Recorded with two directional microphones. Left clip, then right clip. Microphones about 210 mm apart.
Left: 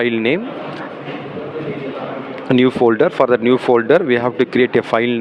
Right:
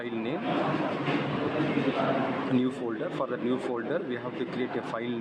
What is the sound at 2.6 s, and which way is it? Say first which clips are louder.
Speech: left 18 dB; 40° left (ahead or behind).